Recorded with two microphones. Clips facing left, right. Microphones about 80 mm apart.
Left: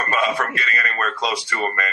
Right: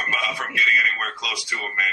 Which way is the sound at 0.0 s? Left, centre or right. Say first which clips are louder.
Left 6 dB; left.